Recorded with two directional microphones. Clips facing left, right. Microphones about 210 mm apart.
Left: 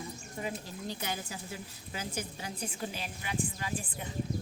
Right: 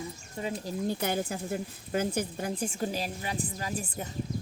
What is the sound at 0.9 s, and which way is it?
A woman's voice, 50° right (ahead or behind).